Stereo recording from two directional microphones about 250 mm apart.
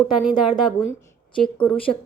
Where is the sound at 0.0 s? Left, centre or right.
Centre.